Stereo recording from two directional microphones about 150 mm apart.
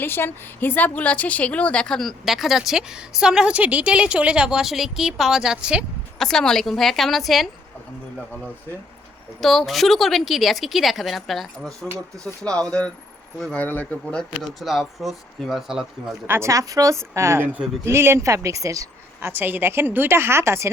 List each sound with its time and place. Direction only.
0.0 s a woman's voice: 15° left (ahead or behind)
9.4 s a woman's voice: centre (ahead or behind)
16.2 s a woman's voice: 15° right (ahead or behind)